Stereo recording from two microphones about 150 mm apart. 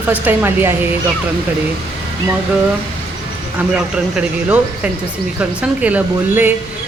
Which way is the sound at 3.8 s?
5° right (ahead or behind).